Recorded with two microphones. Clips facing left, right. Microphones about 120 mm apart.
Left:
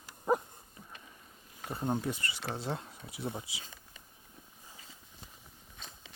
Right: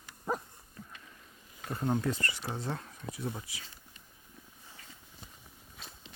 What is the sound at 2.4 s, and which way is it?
Speech, 80° left.